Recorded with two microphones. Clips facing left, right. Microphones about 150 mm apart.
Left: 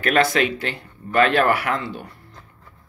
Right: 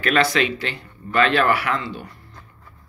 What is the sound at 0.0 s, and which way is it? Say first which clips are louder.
Speech: left 1 dB; 50° left (ahead or behind).